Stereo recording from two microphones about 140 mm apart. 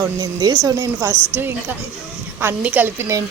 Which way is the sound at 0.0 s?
25° right (ahead or behind).